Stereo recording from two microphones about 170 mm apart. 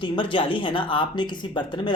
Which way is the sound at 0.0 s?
30° left (ahead or behind).